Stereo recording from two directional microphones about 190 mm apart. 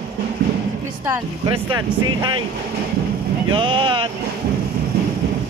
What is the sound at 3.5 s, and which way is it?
Speech, 25° right (ahead or behind).